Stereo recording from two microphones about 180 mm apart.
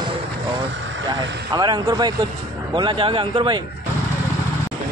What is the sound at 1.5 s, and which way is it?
Speech, 20° right (ahead or behind).